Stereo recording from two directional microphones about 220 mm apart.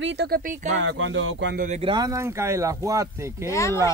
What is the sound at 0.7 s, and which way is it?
Speech, 60° right (ahead or behind).